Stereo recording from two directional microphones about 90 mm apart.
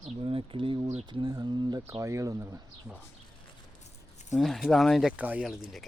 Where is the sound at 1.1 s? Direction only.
60° right (ahead or behind).